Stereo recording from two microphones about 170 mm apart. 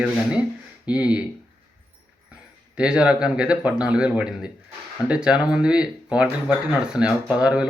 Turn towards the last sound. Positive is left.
turn(degrees=-5)  # may be behind; listen again after turning